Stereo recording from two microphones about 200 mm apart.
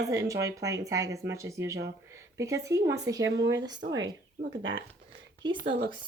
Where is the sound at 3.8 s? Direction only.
65° right (ahead or behind).